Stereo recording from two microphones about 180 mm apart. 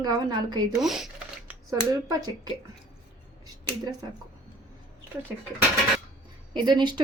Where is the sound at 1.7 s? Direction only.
20° right (ahead or behind).